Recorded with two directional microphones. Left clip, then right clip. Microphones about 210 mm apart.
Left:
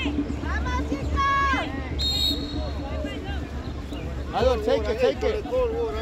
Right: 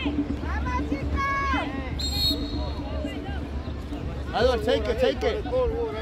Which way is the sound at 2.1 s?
10° right (ahead or behind).